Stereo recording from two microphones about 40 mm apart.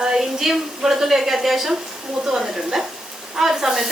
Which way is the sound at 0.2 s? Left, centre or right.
Centre.